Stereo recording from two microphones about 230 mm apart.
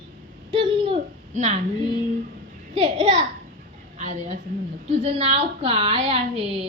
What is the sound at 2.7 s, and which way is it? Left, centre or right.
Speech, right.